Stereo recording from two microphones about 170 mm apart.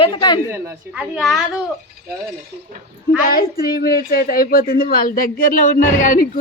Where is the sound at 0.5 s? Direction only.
15° right (ahead or behind).